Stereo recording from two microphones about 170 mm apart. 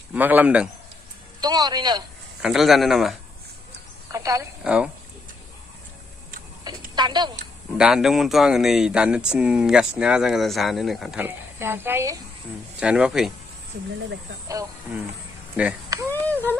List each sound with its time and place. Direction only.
0.1 s a man's voice: 10° right (ahead or behind)
1.4 s speech: 25° right (ahead or behind)
2.4 s speech: centre (ahead or behind)
4.1 s speech: 20° right (ahead or behind)
4.6 s speech: 5° right (ahead or behind)
6.6 s a sound: 25° right (ahead or behind)
7.7 s speech: 5° right (ahead or behind)
14.5 s speech: 20° right (ahead or behind)
15.6 s a man's voice: 10° right (ahead or behind)
16.1 s a sound: 10° left (ahead or behind)